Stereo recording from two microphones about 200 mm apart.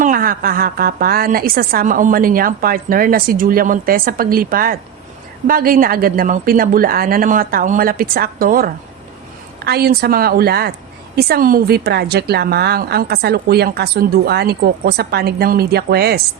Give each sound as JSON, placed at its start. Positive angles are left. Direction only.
{"t": 0.0, "sound": "a woman's voice", "side_deg": -45}